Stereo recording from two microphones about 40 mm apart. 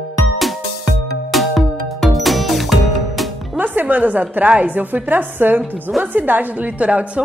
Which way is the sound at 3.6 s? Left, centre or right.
Right.